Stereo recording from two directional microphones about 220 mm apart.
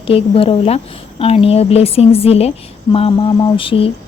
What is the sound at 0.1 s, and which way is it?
Speech, 25° left (ahead or behind).